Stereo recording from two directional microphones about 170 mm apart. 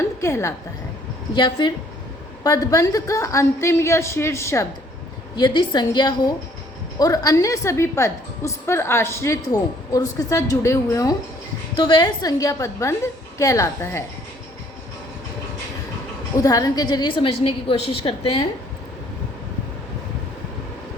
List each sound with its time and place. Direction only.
0.2 s a woman's voice: 15° left (ahead or behind)
1.4 s a woman's voice: 25° left (ahead or behind)
5.4 s a woman's voice: 25° left (ahead or behind)
16.4 s a woman's voice: 20° left (ahead or behind)